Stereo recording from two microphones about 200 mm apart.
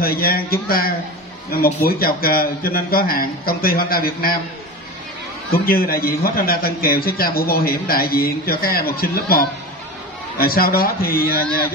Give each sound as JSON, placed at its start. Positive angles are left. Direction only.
{"t": 0.0, "sound": "a man's voice", "side_deg": 50}
{"t": 5.5, "sound": "a man's voice", "side_deg": 50}